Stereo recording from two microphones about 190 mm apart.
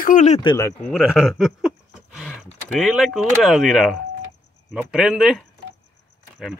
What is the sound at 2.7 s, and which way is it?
Speech, centre (ahead or behind).